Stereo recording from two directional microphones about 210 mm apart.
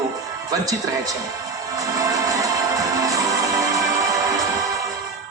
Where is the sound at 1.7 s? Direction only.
15° right (ahead or behind).